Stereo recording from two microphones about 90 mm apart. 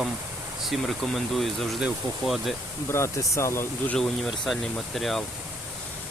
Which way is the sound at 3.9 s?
5° left (ahead or behind).